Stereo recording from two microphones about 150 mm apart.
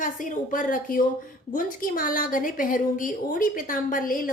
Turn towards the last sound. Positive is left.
turn(degrees=65)  # may be behind; listen again after turning